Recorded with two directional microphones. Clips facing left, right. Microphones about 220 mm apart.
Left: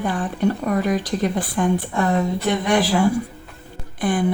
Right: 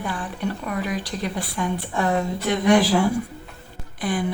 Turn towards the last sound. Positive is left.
turn(degrees=50)  # may be behind; listen again after turning